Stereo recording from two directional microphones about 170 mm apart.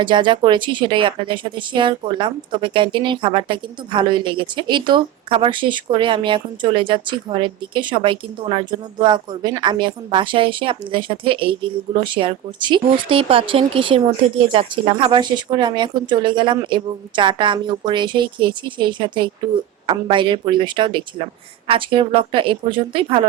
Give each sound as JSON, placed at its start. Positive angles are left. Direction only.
{"t": 0.0, "sound": "a woman's voice", "side_deg": -30}